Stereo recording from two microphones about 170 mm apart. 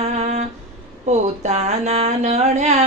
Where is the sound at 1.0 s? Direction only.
40° right (ahead or behind).